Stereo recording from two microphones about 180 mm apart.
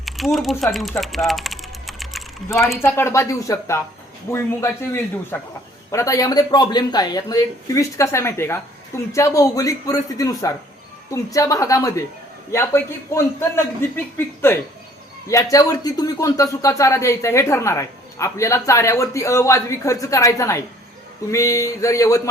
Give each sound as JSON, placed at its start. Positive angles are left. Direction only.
{"t": 0.0, "sound": "typing", "side_deg": 0}
{"t": 2.7, "sound": "speech", "side_deg": 15}